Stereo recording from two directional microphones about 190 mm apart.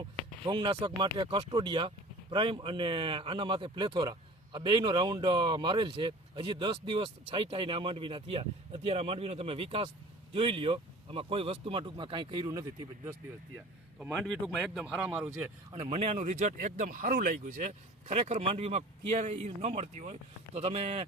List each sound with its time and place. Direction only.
0.4 s speech: 25° right (ahead or behind)
14.1 s speech: 5° left (ahead or behind)
15.3 s speech: 35° right (ahead or behind)